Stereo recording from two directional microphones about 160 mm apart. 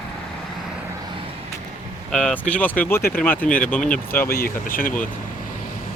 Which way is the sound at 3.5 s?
55° left (ahead or behind).